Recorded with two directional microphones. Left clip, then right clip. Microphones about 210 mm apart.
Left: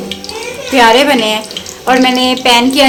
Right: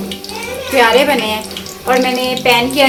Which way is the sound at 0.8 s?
40° left (ahead or behind).